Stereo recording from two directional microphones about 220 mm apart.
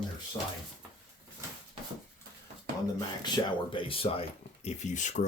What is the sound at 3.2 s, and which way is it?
Speech, 20° left (ahead or behind).